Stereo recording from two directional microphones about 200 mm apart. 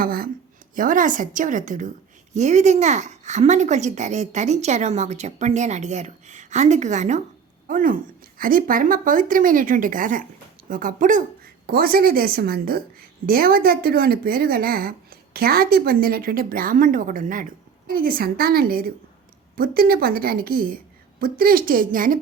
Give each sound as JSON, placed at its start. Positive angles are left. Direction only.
{"t": 0.0, "sound": "a woman's voice", "side_deg": -50}